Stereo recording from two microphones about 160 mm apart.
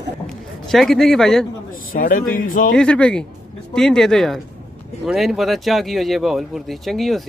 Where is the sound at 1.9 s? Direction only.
60° left (ahead or behind).